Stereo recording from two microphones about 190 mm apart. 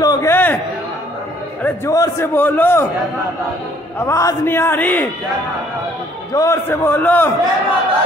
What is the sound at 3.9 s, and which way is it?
A man's voice, 15° left (ahead or behind).